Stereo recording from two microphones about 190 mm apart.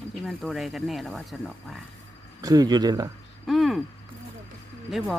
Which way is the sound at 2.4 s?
20° right (ahead or behind).